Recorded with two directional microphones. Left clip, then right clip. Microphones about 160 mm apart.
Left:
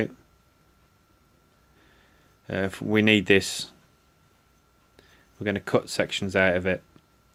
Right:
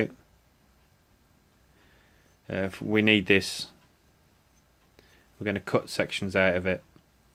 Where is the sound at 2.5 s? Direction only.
20° left (ahead or behind).